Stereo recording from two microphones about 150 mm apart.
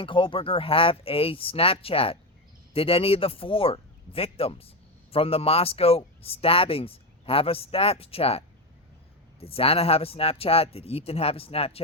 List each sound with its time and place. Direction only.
0.0 s speech: 35° left (ahead or behind)